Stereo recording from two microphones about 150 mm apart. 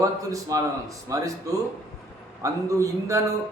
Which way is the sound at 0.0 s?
20° right (ahead or behind).